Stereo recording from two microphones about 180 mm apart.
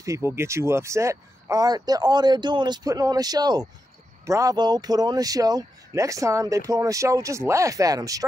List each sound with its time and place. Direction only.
0.0 s speech: 15° right (ahead or behind)